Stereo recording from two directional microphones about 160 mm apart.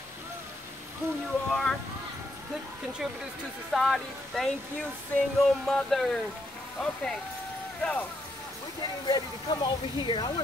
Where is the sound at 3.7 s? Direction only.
Centre (ahead or behind).